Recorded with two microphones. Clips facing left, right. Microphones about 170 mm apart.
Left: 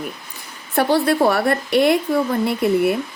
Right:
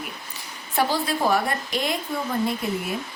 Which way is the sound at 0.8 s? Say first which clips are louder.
Left 7 dB; 65° left (ahead or behind).